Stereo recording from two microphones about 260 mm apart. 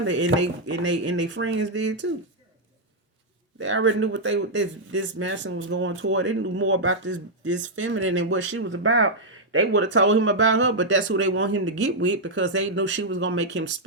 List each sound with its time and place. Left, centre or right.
0.0 s speech: right
3.6 s speech: right